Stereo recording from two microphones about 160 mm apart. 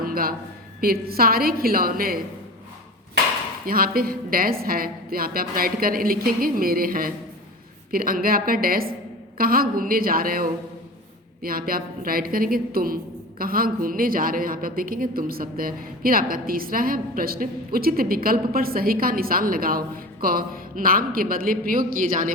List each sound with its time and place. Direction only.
0.0 s a sound: 65° right (ahead or behind)
0.8 s a woman's voice: 70° right (ahead or behind)
3.7 s a woman's voice: 65° right (ahead or behind)